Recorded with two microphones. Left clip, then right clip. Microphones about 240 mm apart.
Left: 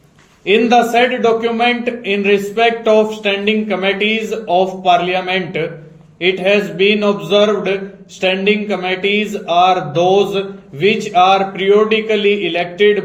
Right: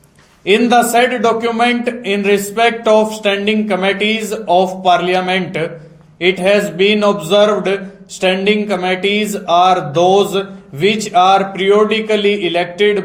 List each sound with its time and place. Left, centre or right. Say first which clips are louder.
0.4 s a man's voice: even; right